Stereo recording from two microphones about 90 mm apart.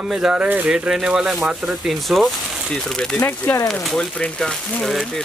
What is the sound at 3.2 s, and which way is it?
Speech, 25° left (ahead or behind).